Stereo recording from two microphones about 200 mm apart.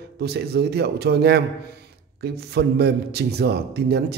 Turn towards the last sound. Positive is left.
turn(degrees=-55)  # may be behind; listen again after turning